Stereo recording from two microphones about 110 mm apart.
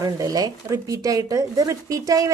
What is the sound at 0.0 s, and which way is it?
Speech, 35° right (ahead or behind).